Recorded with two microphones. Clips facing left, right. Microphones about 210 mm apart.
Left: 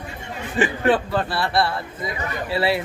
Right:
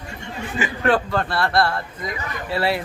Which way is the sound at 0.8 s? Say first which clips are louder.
Right 3 dB; centre (ahead or behind).